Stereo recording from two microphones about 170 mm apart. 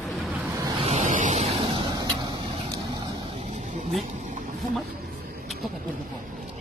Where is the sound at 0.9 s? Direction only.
45° right (ahead or behind).